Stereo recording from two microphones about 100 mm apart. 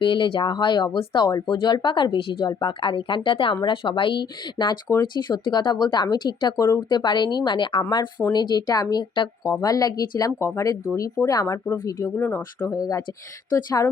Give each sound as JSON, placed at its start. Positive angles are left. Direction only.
{"t": 0.0, "sound": "speech", "side_deg": 55}
{"t": 6.6, "sound": "speech", "side_deg": 30}
{"t": 6.9, "sound": "speech", "side_deg": 45}
{"t": 9.5, "sound": "speech", "side_deg": 35}
{"t": 12.1, "sound": "speech", "side_deg": 20}